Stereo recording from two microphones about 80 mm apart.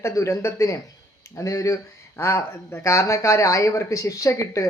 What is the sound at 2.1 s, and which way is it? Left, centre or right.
Speech, left.